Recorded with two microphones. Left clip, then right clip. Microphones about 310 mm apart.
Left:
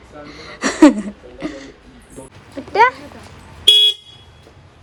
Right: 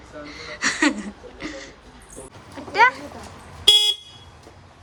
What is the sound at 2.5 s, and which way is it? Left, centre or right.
Speech, centre.